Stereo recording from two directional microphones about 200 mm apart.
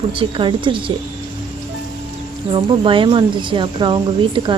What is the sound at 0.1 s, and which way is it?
Speech, 25° right (ahead or behind).